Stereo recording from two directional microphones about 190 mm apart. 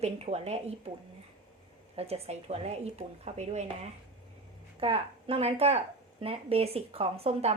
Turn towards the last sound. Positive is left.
turn(degrees=-35)  # may be behind; listen again after turning